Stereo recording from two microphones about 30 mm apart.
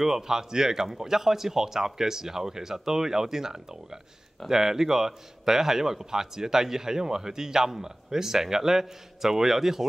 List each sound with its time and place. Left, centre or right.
0.0 s speech: centre